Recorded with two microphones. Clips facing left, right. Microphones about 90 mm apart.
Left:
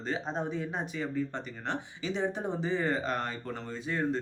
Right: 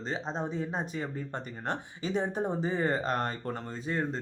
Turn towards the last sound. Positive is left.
turn(degrees=-35)  # may be behind; listen again after turning